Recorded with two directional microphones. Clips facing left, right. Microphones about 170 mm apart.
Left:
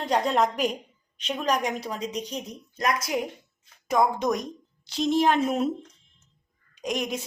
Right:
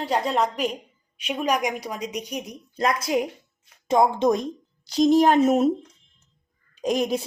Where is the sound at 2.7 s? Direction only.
30° right (ahead or behind).